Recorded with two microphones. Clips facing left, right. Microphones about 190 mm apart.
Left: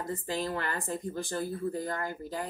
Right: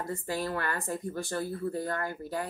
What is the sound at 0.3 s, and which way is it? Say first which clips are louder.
Speech: right 1 dB; 20° left (ahead or behind).